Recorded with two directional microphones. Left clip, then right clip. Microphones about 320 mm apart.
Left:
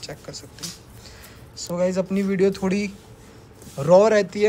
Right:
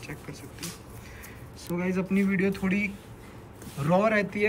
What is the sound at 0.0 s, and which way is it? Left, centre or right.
Speech, centre.